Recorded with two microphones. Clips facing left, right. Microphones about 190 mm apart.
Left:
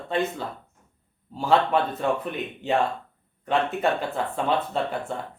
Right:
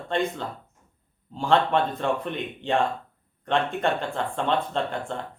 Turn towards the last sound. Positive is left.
turn(degrees=5)  # may be behind; listen again after turning